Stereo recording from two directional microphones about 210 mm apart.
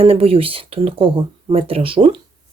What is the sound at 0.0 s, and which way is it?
Speech, 25° right (ahead or behind).